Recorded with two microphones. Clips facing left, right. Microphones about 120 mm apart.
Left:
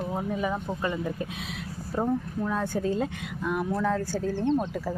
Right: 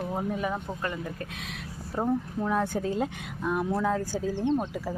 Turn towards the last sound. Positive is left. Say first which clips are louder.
# left 1 dB
turn(degrees=-15)  # may be behind; listen again after turning